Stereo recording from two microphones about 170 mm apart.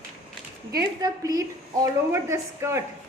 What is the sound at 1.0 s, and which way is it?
A woman's voice, 20° right (ahead or behind).